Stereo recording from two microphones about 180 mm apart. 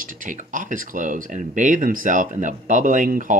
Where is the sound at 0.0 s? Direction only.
45° right (ahead or behind).